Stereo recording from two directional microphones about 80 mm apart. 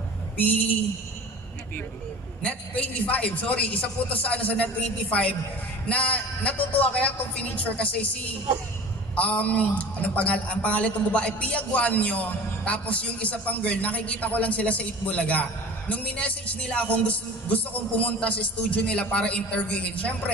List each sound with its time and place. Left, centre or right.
0.4 s a sound: centre
2.4 s a man's voice: centre
9.1 s a man's voice: centre